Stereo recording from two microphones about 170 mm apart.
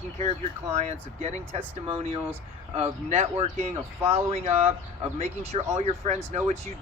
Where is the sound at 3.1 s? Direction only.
40° right (ahead or behind).